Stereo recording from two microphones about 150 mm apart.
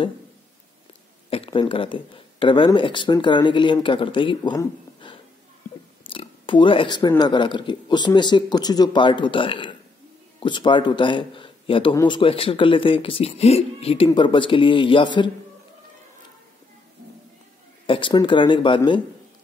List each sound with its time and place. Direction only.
1.3 s speech: 35° left (ahead or behind)
17.8 s speech: 35° left (ahead or behind)